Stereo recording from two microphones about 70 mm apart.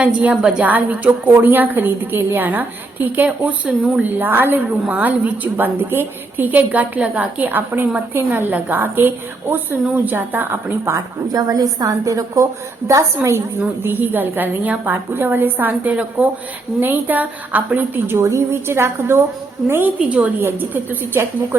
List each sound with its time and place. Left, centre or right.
0.0 s a woman's voice: centre
10.9 s a woman's voice: right
13.8 s a woman's voice: right
20.1 s a woman's voice: right